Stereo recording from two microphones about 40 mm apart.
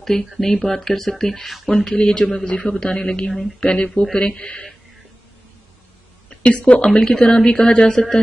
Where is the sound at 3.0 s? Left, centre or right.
Centre.